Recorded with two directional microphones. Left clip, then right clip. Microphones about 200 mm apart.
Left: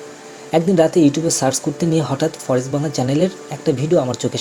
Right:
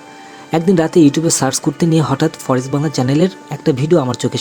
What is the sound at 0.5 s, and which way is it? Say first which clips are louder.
Speech: right 1 dB; 50° right (ahead or behind).